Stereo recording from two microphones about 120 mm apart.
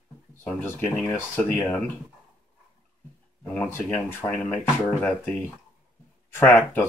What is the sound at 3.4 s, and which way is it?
Speech, 15° left (ahead or behind).